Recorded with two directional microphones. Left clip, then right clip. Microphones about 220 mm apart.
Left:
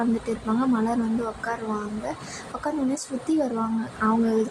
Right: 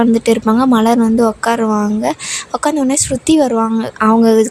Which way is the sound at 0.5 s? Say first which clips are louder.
Right 13 dB; 45° right (ahead or behind).